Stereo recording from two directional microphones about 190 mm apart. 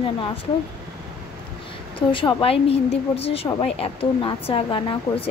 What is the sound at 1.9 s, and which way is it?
A woman's voice, 25° left (ahead or behind).